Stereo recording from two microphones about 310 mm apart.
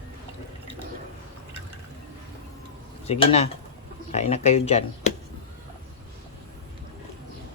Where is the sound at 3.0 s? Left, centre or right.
Centre.